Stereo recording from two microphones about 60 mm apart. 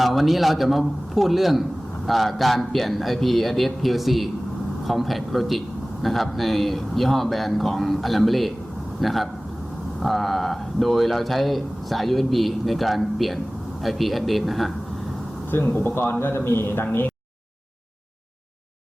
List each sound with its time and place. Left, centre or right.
0.0 s a man's voice: centre
15.7 s a man's voice: left